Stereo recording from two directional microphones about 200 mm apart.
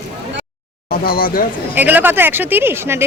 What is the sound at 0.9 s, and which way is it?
Speech, 50° left (ahead or behind).